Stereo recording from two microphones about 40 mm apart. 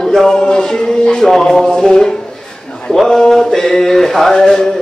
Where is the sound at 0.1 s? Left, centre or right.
Centre.